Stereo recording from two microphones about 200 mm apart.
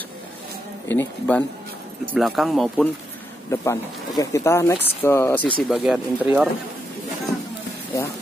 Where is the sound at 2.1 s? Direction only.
Centre (ahead or behind).